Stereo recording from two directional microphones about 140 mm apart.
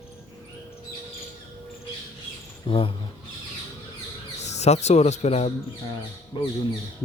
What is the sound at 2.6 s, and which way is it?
Speech, 40° left (ahead or behind).